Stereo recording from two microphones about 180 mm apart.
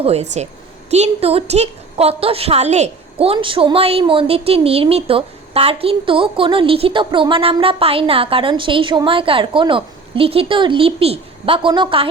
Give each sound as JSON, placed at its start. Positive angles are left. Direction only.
{"t": 0.0, "sound": "a woman's voice", "side_deg": -35}